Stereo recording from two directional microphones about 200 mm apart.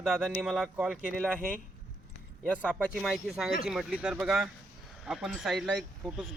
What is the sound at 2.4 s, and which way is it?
Speech, 5° left (ahead or behind).